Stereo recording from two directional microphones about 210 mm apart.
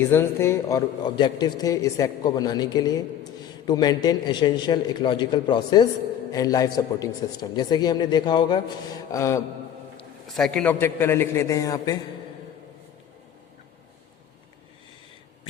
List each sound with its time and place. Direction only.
0.0 s speech: 10° left (ahead or behind)
10.3 s a man's voice: 5° left (ahead or behind)